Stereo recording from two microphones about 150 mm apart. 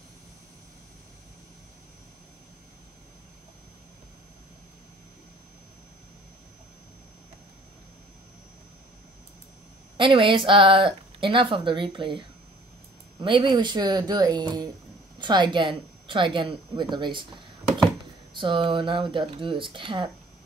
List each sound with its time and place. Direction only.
9.9 s speech: 35° right (ahead or behind)
13.2 s speech: 35° right (ahead or behind)
18.3 s speech: 35° right (ahead or behind)